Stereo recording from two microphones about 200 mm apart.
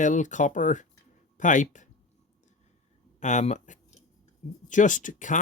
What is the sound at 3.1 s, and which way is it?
Speech, 35° left (ahead or behind).